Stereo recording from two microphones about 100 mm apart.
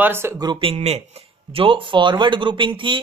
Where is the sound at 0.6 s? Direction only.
75° right (ahead or behind).